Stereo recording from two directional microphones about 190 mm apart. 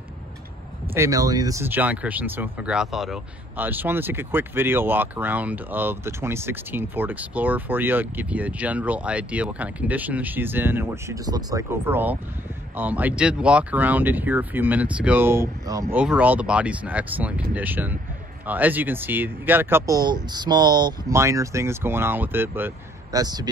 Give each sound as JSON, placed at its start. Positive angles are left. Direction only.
{"t": 0.9, "sound": "speech", "side_deg": -15}